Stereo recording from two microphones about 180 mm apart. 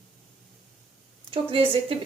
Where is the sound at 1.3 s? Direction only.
30° right (ahead or behind).